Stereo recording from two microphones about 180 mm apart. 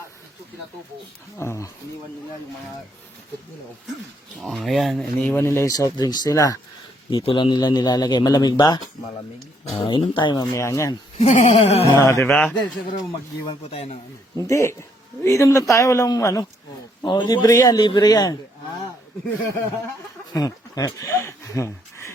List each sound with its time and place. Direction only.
1.4 s speech: 15° left (ahead or behind)
4.4 s speech: centre (ahead or behind); by 6.6 s 20° left (ahead or behind)
7.1 s speech: 30° left (ahead or behind)
9.8 s speech: 25° left (ahead or behind)
11.2 s speech: 40° left (ahead or behind)
11.9 s speech: 15° left (ahead or behind)
13.5 s speech: 35° left (ahead or behind)
14.3 s speech: 15° left (ahead or behind)
20.3 s a sound: 20° left (ahead or behind)